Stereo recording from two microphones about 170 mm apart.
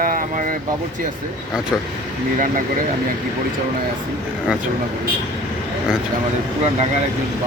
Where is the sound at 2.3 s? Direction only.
50° right (ahead or behind).